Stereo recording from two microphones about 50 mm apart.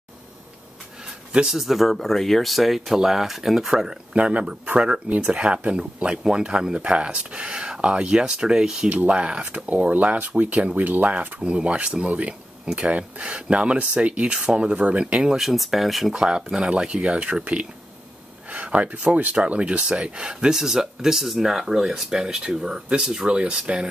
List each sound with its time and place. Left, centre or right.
1.5 s speech: centre
3.7 s speech: centre
8.8 s speech: right
9.7 s speech: right
15.3 s speech: centre; by 17.4 s right
18.5 s speech: right
19.3 s speech: right